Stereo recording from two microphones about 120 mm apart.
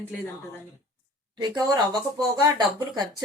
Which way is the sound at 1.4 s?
35° right (ahead or behind).